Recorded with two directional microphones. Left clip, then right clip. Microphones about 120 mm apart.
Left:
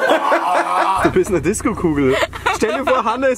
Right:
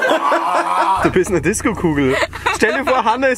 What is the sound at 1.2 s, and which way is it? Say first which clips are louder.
Speech: right 1 dB; 35° right (ahead or behind).